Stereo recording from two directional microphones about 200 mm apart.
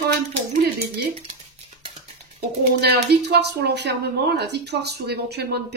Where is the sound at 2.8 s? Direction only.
55° right (ahead or behind).